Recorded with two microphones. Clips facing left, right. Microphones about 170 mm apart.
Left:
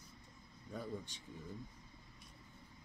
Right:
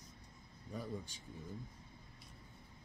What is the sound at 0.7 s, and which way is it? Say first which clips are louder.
Speech: even; centre (ahead or behind).